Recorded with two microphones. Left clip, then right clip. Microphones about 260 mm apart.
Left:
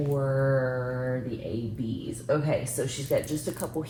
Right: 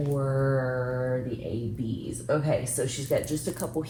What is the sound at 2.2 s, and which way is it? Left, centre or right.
Speech, centre.